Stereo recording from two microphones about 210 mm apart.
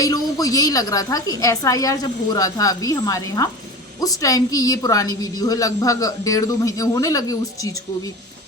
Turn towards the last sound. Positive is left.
turn(degrees=15)  # may be behind; listen again after turning